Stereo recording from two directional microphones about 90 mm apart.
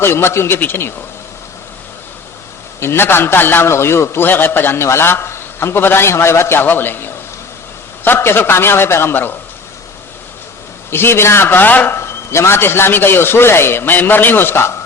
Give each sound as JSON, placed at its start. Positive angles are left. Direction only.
{"t": 0.0, "sound": "a man's voice", "side_deg": 25}
{"t": 2.8, "sound": "a man's voice", "side_deg": 25}
{"t": 10.9, "sound": "a man's voice", "side_deg": 25}